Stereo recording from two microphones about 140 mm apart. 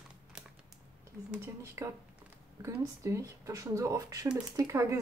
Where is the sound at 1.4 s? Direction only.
20° right (ahead or behind).